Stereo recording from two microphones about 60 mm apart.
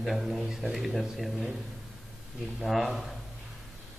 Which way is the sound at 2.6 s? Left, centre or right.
Centre.